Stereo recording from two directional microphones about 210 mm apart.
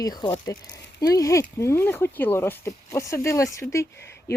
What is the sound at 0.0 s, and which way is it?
Speech, 20° left (ahead or behind).